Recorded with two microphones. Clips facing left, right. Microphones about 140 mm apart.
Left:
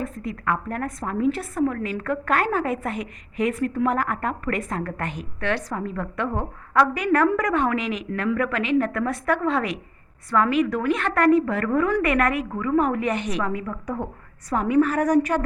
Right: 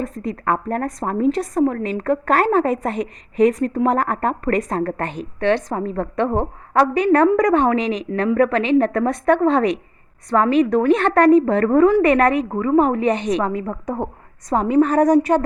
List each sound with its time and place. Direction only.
0.0 s a woman's voice: 30° right (ahead or behind)
13.7 s a woman's voice: 40° right (ahead or behind)
14.5 s a woman's voice: 30° right (ahead or behind)